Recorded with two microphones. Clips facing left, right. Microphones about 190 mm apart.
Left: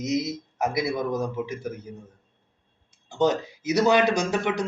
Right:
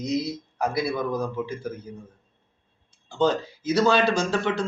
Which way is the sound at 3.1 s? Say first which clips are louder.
Even; 15° left (ahead or behind).